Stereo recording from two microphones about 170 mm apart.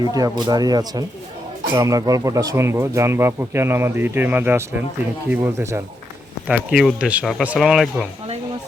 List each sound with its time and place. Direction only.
0.1 s speech: 25° right (ahead or behind); by 8.0 s centre (ahead or behind)